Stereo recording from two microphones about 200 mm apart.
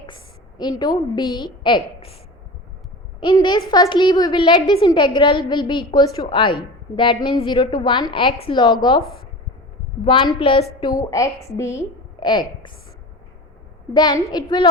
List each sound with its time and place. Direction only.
0.6 s a woman's voice: 20° left (ahead or behind)
3.2 s a woman's voice: 25° left (ahead or behind)
10.0 s a woman's voice: 25° left (ahead or behind)
13.9 s a woman's voice: 20° left (ahead or behind)